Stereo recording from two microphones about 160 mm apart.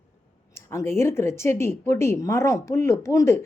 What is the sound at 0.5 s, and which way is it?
Speech, 15° left (ahead or behind).